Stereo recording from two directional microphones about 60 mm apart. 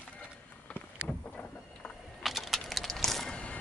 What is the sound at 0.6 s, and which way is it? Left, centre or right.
Vehicle, left.